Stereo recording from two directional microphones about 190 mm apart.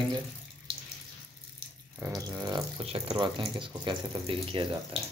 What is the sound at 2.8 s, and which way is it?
Speech, 30° right (ahead or behind).